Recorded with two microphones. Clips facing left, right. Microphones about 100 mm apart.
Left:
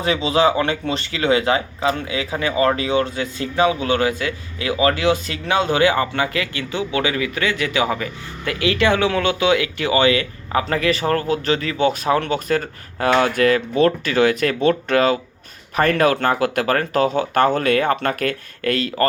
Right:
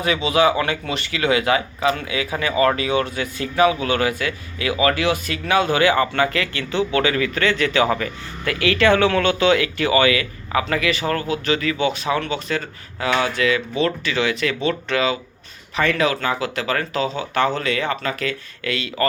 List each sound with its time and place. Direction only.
0.0 s speech: 30° left (ahead or behind)